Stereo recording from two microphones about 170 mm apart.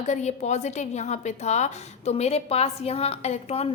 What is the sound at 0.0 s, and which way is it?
Speech, 45° left (ahead or behind).